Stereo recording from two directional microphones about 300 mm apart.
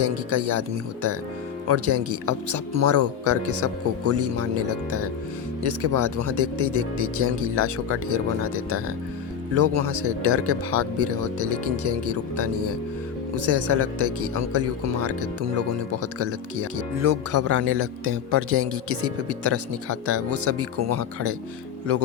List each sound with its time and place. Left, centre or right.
0.0 s speech: right
1.6 s speech: right